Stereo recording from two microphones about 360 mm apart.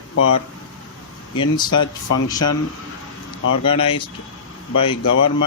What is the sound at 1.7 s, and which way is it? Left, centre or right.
Speech, left.